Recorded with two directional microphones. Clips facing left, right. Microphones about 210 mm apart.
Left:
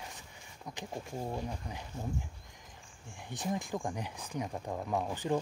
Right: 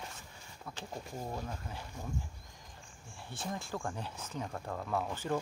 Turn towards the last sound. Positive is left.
turn(degrees=15)  # may be behind; listen again after turning